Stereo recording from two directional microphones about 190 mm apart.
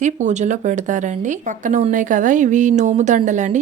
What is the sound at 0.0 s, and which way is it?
Speech, 40° right (ahead or behind).